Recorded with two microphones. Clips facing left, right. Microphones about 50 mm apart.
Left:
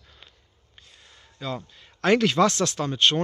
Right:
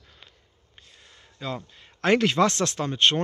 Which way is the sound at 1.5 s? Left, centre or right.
Right.